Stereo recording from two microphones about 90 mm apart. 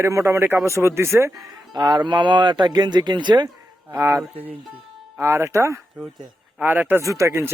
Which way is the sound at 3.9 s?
25° right (ahead or behind).